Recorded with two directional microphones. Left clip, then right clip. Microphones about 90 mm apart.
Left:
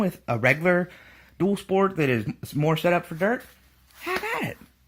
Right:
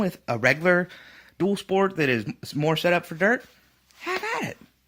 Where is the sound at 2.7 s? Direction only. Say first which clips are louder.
Even; 40° right (ahead or behind).